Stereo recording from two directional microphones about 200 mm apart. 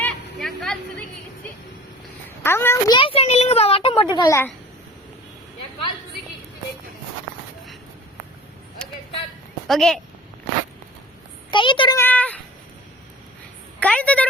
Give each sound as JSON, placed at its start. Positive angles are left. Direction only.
{"t": 0.0, "sound": "a sound", "side_deg": 5}
{"t": 2.4, "sound": "a woman's voice", "side_deg": 10}
{"t": 8.8, "sound": "a sound", "side_deg": 5}
{"t": 9.6, "sound": "speech", "side_deg": 0}
{"t": 11.5, "sound": "a child's voice", "side_deg": 25}
{"t": 11.9, "sound": "speech", "side_deg": 10}
{"t": 13.7, "sound": "a woman's voice", "side_deg": 5}